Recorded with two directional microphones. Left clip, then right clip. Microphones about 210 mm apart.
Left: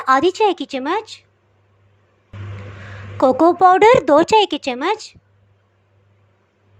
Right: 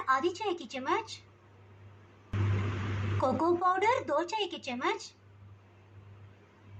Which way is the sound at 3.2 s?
40° left (ahead or behind).